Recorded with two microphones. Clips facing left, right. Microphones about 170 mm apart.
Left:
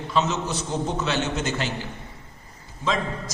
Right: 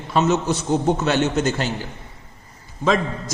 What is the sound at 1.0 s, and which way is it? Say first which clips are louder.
Speech: right 6 dB; 45° right (ahead or behind).